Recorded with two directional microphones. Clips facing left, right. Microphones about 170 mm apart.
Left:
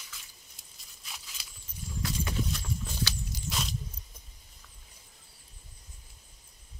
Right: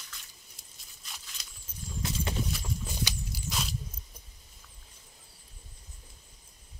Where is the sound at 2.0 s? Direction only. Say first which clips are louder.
Even; 25° right (ahead or behind).